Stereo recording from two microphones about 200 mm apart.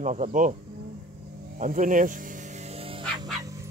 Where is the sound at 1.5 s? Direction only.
40° right (ahead or behind).